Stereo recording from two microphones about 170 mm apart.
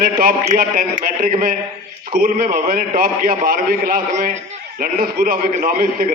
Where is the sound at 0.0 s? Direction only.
60° right (ahead or behind).